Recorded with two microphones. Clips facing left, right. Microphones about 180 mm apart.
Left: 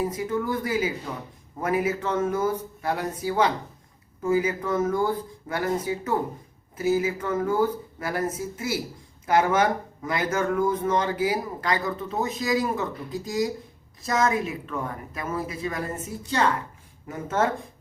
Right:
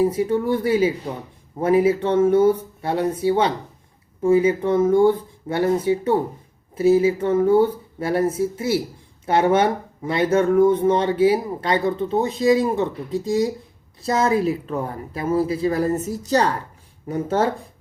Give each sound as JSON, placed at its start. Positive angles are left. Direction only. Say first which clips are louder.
{"t": 0.0, "sound": "a woman's voice", "louder": "right 7 dB", "side_deg": -30}